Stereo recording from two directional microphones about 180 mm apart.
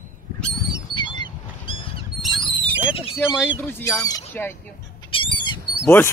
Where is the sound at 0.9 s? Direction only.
25° left (ahead or behind).